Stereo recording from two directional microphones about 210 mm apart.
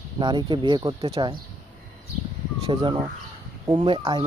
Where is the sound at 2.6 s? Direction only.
25° right (ahead or behind).